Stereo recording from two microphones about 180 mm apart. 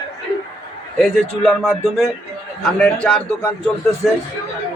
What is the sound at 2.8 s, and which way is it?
Speech, 5° left (ahead or behind).